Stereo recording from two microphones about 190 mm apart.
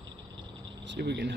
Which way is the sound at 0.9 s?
65° right (ahead or behind).